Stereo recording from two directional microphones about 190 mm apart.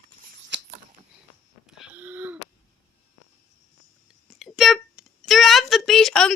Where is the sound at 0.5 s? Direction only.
65° right (ahead or behind).